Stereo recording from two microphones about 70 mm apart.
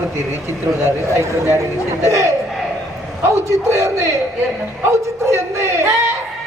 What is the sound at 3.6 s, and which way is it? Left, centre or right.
A man's voice, right.